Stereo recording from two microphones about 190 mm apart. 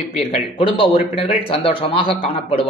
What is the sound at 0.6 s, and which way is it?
A man's voice, 30° left (ahead or behind).